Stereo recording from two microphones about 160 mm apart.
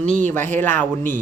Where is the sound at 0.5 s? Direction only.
15° left (ahead or behind).